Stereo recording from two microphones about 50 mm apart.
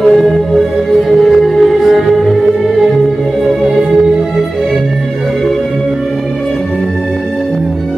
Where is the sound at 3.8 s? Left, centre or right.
Centre.